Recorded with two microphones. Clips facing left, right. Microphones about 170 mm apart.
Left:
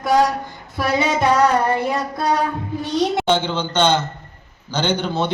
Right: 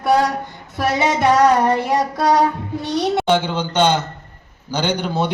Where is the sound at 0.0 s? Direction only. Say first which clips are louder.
Even; 65° right (ahead or behind); by 2.4 s 85° right.